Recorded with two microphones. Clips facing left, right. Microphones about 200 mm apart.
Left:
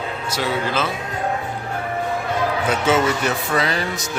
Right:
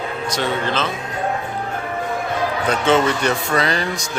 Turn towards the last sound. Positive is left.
turn(degrees=5)  # may be behind; listen again after turning